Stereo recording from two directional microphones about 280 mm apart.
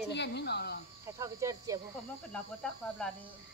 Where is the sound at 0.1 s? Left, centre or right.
Left.